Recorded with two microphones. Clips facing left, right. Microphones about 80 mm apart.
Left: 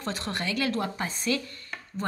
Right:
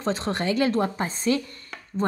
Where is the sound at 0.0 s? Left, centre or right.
Right.